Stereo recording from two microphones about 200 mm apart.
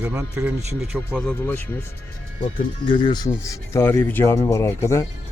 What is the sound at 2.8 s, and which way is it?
Speech, 25° left (ahead or behind).